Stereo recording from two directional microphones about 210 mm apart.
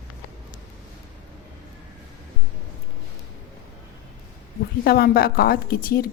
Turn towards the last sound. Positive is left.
turn(degrees=45)  # may be behind; listen again after turning